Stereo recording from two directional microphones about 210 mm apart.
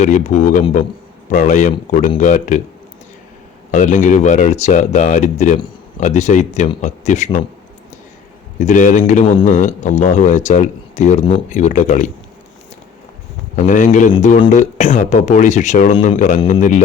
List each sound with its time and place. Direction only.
0.0 s speech: 35° left (ahead or behind)
3.7 s speech: 35° left (ahead or behind)
8.5 s speech: 35° left (ahead or behind)
13.6 s speech: 40° left (ahead or behind)